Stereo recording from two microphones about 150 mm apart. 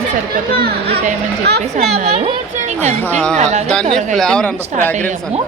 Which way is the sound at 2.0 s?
45° right (ahead or behind).